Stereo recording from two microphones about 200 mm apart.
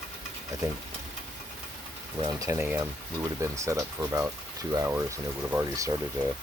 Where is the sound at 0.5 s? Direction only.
15° right (ahead or behind).